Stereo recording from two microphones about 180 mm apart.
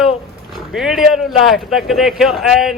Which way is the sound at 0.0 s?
Centre (ahead or behind).